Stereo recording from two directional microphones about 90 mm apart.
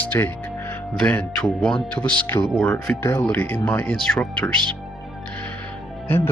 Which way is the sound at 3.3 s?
20° left (ahead or behind).